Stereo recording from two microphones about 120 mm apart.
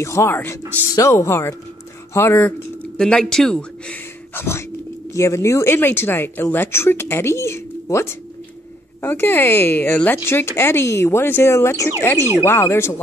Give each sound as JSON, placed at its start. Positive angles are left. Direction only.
{"t": 0.0, "sound": "a woman's voice", "side_deg": 25}
{"t": 3.0, "sound": "a woman's voice", "side_deg": 5}